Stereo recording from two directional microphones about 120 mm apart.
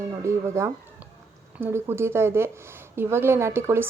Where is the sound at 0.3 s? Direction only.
25° right (ahead or behind).